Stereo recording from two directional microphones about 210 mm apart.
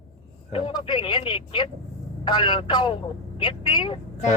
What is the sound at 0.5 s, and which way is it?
Speech, 25° left (ahead or behind).